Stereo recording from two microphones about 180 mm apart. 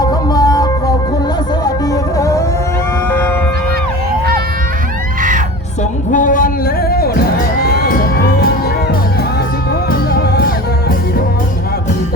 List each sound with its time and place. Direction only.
0.0 s music: 20° left (ahead or behind)
6.1 s music: 45° left (ahead or behind)
7.6 s crowd: 60° left (ahead or behind)
10.1 s music: 60° left (ahead or behind)